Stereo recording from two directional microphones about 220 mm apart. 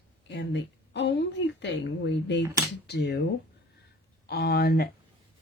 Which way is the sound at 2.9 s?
50° left (ahead or behind).